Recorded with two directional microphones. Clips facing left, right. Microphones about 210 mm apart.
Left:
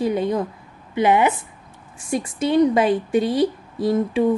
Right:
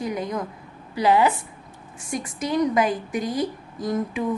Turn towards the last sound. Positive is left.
turn(degrees=30)  # may be behind; listen again after turning